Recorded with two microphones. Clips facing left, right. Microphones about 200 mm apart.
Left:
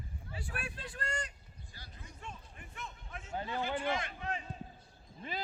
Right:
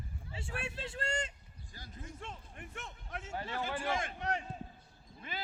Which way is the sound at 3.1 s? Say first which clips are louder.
Right 4 dB; 75° right (ahead or behind).